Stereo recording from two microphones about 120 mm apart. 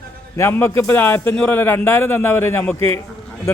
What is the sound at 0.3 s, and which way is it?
Speech, 20° left (ahead or behind).